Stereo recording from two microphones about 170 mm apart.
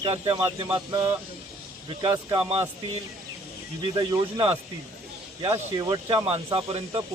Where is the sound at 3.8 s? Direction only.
30° right (ahead or behind).